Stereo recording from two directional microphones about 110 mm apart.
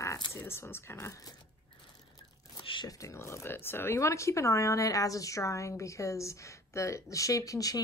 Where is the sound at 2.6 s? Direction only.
50° left (ahead or behind).